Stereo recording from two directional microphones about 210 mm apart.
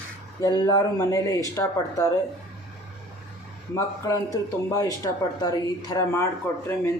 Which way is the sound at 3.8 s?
15° left (ahead or behind).